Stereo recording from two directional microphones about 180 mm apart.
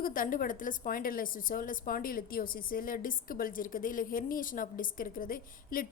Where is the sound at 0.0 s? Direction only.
50° left (ahead or behind).